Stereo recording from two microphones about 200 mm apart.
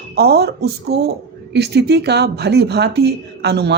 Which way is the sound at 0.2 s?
55° right (ahead or behind).